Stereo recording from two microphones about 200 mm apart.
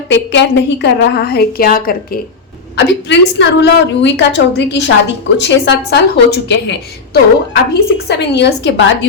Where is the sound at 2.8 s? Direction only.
60° left (ahead or behind).